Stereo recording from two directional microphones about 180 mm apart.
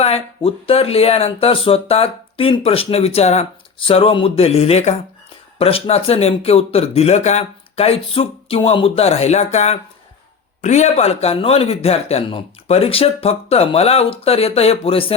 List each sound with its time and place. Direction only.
0.0 s speech: 35° left (ahead or behind)